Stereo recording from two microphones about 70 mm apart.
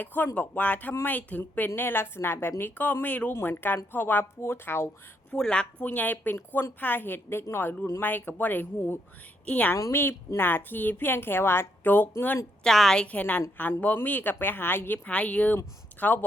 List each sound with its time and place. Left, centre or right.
0.0 s a woman's voice: left
3.3 s a woman's voice: left
5.3 s a woman's voice: centre
5.9 s a woman's voice: left
9.9 s a woman's voice: left
12.6 s a woman's voice: centre
13.0 s a woman's voice: left
15.0 s a woman's voice: left